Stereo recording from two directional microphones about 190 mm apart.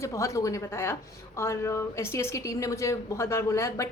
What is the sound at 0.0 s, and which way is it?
A woman's voice, 15° left (ahead or behind).